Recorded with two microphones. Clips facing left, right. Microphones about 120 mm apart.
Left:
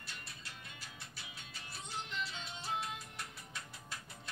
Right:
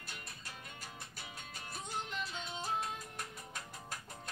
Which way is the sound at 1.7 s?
45° right (ahead or behind).